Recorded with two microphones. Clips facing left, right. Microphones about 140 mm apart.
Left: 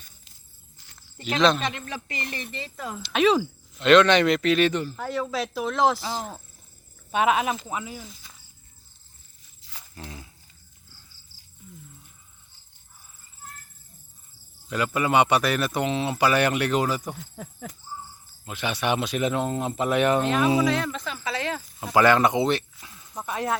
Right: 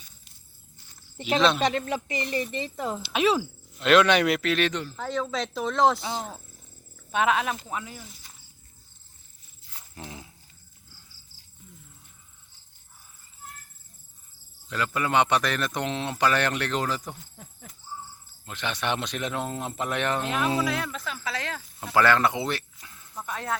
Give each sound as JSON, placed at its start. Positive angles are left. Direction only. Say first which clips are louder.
{"t": 1.2, "sound": "speech", "louder": "left 1 dB", "side_deg": -5}
{"t": 2.3, "sound": "speech", "louder": "right 7 dB", "side_deg": -20}
{"t": 3.0, "sound": "speech", "louder": "left 4 dB", "side_deg": -5}
{"t": 9.6, "sound": "wild animals", "louder": "left 2 dB", "side_deg": 90}
{"t": 9.9, "sound": "a sound", "louder": "even", "side_deg": -15}
{"t": 14.7, "sound": "speech", "louder": "left 3 dB", "side_deg": 10}
{"t": 17.2, "sound": "speech", "louder": "left 9 dB", "side_deg": 90}
{"t": 18.4, "sound": "speech", "louder": "left 3 dB", "side_deg": 10}
{"t": 20.7, "sound": "speech", "louder": "left 4 dB", "side_deg": -5}